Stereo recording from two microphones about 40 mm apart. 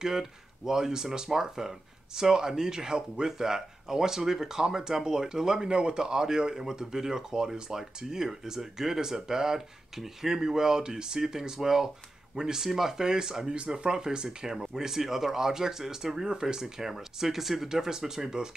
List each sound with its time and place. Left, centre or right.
0.0 s speech: centre